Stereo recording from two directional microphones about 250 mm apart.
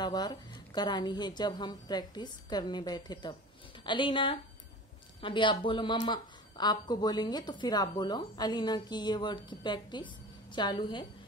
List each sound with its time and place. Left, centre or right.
0.0 s a woman's voice: centre